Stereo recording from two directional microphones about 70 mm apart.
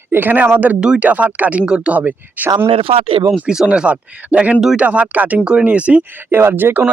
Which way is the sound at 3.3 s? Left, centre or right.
Centre.